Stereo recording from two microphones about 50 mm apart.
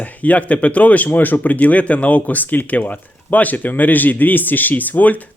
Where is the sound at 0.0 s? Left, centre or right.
Left.